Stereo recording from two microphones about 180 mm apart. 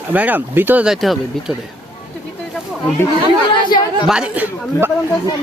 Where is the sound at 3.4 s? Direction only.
25° left (ahead or behind).